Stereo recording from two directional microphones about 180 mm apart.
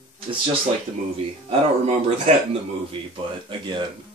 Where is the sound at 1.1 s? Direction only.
35° right (ahead or behind).